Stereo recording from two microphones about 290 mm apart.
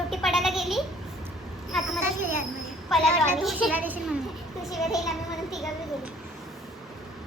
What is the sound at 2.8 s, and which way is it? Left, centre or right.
A woman's voice, centre.